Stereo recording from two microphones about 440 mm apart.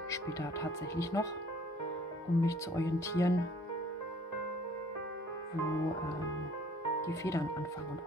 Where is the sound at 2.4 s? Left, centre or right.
Centre.